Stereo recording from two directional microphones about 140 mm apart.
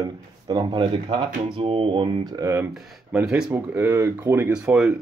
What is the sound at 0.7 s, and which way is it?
Speech, 40° right (ahead or behind).